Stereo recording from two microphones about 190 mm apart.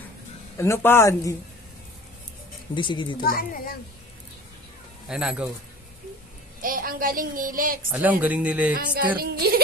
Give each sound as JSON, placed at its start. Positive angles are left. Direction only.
{"t": 0.6, "sound": "speech", "side_deg": 15}
{"t": 2.7, "sound": "speech", "side_deg": 25}
{"t": 3.2, "sound": "a woman's voice", "side_deg": 50}
{"t": 5.0, "sound": "speech", "side_deg": -5}
{"t": 6.6, "sound": "speech", "side_deg": -50}
{"t": 7.9, "sound": "speech", "side_deg": -10}
{"t": 9.2, "sound": "speech", "side_deg": -55}